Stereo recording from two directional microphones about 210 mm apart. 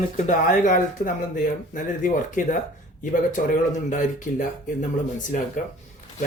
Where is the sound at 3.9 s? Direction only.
35° left (ahead or behind).